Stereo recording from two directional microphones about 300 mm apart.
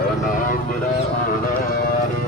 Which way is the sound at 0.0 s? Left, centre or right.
Left.